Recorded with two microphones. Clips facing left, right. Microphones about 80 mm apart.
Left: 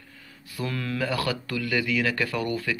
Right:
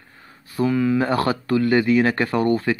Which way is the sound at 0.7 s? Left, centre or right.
Centre.